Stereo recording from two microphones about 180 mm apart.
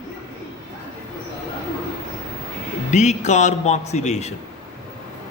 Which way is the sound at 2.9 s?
40° left (ahead or behind).